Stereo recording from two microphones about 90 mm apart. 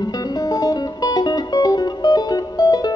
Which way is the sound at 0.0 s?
45° left (ahead or behind).